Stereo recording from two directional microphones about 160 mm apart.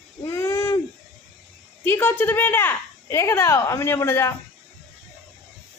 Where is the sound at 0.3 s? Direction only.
15° left (ahead or behind).